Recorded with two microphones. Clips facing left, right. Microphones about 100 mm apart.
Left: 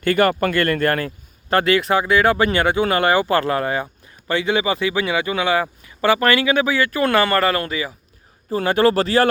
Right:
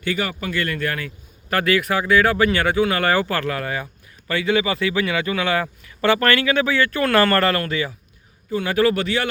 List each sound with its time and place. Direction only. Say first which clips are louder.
0.0 s speech: left 8 dB; 55° left (ahead or behind)
1.5 s speech: left 3 dB; 25° left (ahead or behind); by 7.9 s 10° left (ahead or behind)
8.4 s speech: left 2 dB; 35° left (ahead or behind)